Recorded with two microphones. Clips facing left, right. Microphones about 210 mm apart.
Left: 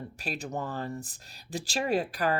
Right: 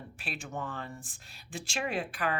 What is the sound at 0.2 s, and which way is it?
Speech, 40° left (ahead or behind).